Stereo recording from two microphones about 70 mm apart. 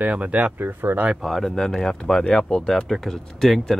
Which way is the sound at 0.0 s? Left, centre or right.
Centre.